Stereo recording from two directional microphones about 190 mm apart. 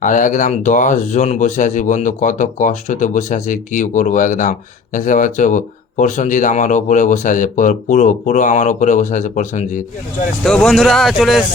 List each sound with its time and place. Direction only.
0.0 s speech: 45° left (ahead or behind)
10.4 s speech: 5° left (ahead or behind)